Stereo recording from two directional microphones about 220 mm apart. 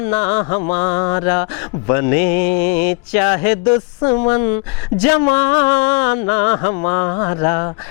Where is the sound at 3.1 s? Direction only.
20° left (ahead or behind).